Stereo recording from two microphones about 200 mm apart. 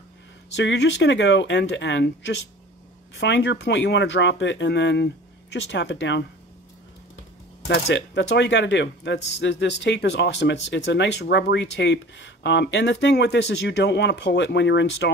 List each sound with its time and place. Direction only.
0.6 s speech: 60° left (ahead or behind)
7.6 s speech: 60° left (ahead or behind)